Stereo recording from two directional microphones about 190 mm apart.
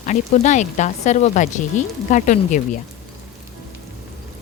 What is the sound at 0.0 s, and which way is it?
A woman's voice, 40° left (ahead or behind).